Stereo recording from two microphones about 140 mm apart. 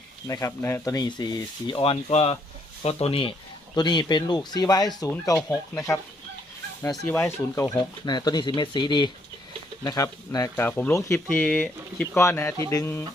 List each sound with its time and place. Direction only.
0.3 s speech: 25° left (ahead or behind)
1.8 s speech: 45° left (ahead or behind)
3.8 s speech: 30° left (ahead or behind)
7.1 s speech: 15° left (ahead or behind)
7.8 s speech: 30° left (ahead or behind)
10.5 s speech: 15° left (ahead or behind)
12.1 s speech: 20° left (ahead or behind)